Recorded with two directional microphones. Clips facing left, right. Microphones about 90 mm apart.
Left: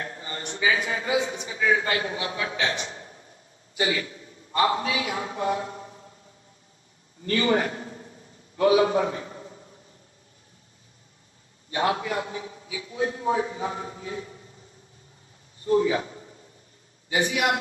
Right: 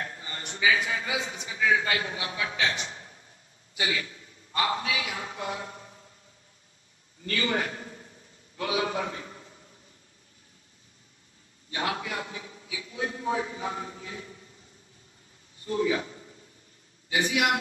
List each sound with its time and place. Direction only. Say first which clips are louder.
0.0 s a man's voice: left 3 dB; 30° left (ahead or behind)
7.2 s a man's voice: left 6 dB; 35° left (ahead or behind)
11.7 s a man's voice: left 6 dB; 30° left (ahead or behind)
15.6 s a man's voice: left 5 dB; 30° left (ahead or behind)